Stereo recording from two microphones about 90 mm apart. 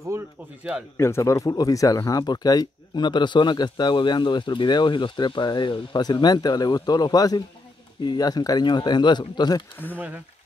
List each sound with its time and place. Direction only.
0.9 s speech: 30° left (ahead or behind); by 9.7 s 55° left (ahead or behind)
9.9 s speech: 20° right (ahead or behind)